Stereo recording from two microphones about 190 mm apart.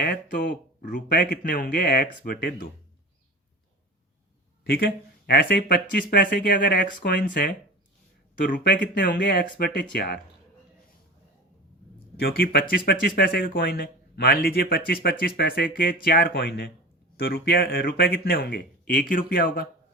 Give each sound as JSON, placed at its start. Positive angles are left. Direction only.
{"t": 0.0, "sound": "speech", "side_deg": 50}
{"t": 4.6, "sound": "speech", "side_deg": 55}
{"t": 6.1, "sound": "speech", "side_deg": 55}
{"t": 8.8, "sound": "speech", "side_deg": 65}
{"t": 12.1, "sound": "speech", "side_deg": 55}